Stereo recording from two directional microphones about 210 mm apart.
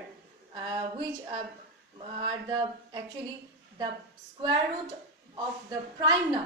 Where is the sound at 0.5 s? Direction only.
20° right (ahead or behind).